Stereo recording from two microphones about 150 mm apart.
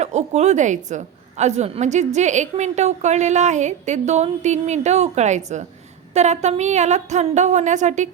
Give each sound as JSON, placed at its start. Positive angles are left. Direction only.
{"t": 0.0, "sound": "a woman's voice", "side_deg": -50}